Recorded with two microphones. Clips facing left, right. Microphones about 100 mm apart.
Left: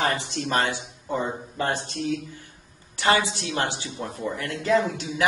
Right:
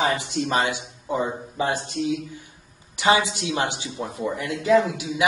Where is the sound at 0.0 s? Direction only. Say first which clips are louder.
Right 2 dB; 15° right (ahead or behind).